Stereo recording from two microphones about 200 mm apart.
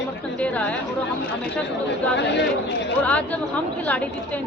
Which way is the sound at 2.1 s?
60° left (ahead or behind).